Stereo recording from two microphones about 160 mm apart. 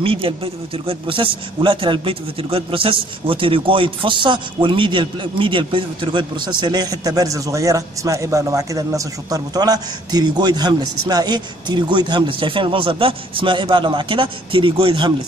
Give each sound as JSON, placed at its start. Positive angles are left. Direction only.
{"t": 0.0, "sound": "a man's voice", "side_deg": -35}